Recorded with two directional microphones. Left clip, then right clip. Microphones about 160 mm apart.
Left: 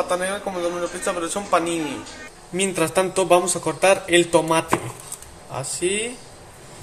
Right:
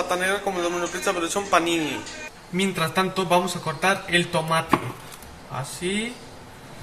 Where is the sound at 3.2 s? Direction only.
60° left (ahead or behind).